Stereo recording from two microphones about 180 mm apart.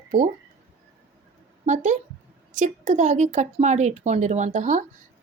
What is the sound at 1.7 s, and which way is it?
A woman's voice, 45° right (ahead or behind).